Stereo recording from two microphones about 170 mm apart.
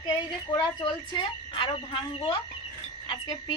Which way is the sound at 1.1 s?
30° left (ahead or behind).